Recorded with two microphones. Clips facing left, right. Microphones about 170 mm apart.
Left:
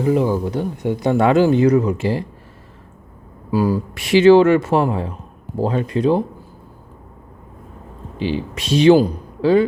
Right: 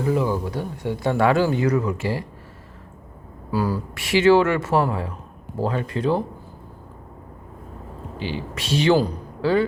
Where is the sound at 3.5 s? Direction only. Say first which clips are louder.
Left 6 dB; 15° left (ahead or behind).